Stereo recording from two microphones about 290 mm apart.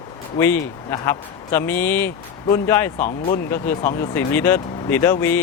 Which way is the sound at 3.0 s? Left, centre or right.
Left.